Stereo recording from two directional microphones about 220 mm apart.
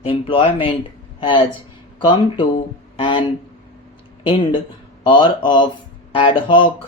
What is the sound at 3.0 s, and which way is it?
Speech, 20° left (ahead or behind).